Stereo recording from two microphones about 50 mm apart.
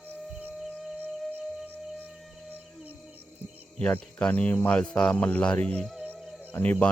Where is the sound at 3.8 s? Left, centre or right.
Left.